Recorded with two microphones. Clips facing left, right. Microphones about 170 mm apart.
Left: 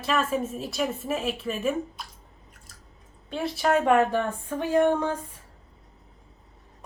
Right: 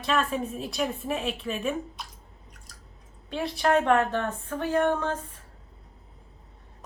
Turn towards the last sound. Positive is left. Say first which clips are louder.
# left 3 dB
turn(degrees=15)  # may be behind; listen again after turning